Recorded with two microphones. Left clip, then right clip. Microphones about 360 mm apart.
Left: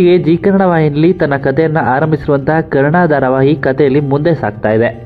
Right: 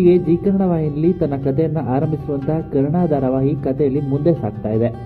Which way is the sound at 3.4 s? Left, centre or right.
Centre.